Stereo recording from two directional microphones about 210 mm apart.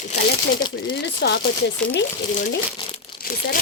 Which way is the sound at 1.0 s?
55° left (ahead or behind).